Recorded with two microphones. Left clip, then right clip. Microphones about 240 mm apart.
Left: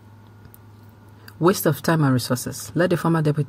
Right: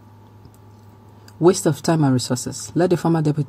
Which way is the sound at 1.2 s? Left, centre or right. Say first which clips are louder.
Right 3 dB; left.